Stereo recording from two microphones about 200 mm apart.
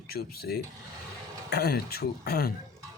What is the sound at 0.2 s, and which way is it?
Speech, 50° left (ahead or behind).